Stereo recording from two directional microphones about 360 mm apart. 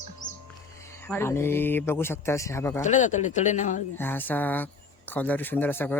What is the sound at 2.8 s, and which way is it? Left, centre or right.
Speech, centre.